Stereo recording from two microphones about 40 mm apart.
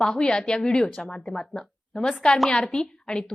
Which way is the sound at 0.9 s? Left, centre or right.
Centre.